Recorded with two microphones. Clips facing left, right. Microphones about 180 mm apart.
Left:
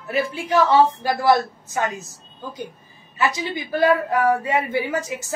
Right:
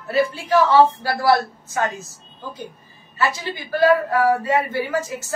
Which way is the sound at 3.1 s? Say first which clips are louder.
Left 1 dB; 20° left (ahead or behind).